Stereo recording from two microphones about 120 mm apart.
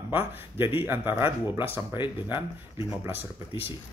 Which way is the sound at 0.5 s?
20° right (ahead or behind).